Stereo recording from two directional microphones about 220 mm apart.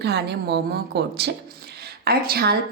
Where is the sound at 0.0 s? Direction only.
50° right (ahead or behind).